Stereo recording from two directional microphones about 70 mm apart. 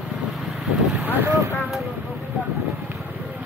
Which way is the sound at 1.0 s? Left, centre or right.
Right.